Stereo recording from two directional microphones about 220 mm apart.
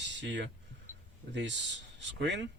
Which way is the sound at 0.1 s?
55° right (ahead or behind).